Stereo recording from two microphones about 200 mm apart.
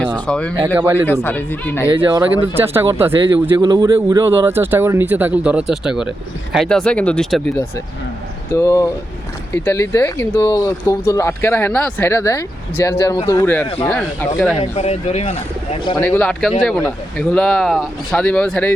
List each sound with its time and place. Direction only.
0.3 s speech: 5° left (ahead or behind)
0.6 s speech: 10° right (ahead or behind)
1.0 s speech: 10° left (ahead or behind)
2.6 s speech: 10° right (ahead or behind)
8.5 s speech: 15° left (ahead or behind)
14.6 s speech: 30° left (ahead or behind)
16.0 s speech: 10° left (ahead or behind)